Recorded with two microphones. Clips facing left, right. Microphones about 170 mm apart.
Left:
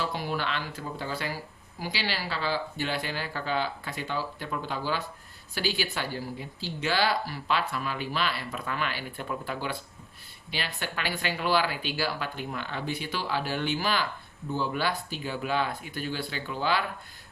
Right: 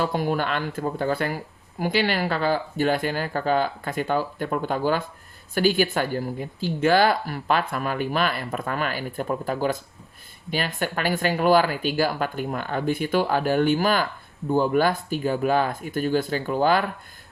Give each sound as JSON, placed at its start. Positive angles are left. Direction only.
{"t": 0.0, "sound": "speech", "side_deg": -50}